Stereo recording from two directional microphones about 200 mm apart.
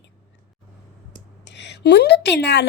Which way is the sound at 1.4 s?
60° left (ahead or behind).